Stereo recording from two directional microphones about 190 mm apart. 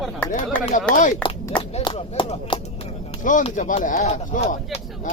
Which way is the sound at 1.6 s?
30° left (ahead or behind).